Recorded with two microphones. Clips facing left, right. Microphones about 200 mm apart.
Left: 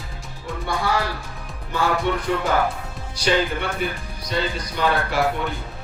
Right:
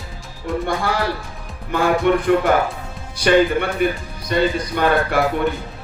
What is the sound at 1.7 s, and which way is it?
Music, 55° right (ahead or behind).